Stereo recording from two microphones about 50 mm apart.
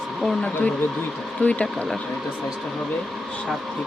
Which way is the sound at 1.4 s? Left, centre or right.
Left.